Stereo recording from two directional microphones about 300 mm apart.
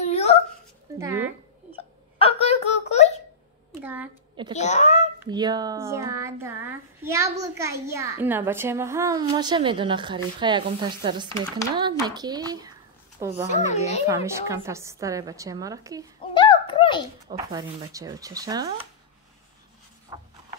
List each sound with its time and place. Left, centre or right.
0.0 s a sound: left
0.9 s a sound: centre
1.8 s hiccup: centre
3.8 s a woman's voice: centre
4.6 s a child's voice: left
5.2 s a child's voice: centre
13.7 s a child's voice: left
14.0 s a child's voice: centre
16.3 s a sound: centre
17.3 s a child's voice: centre
20.1 s writing: centre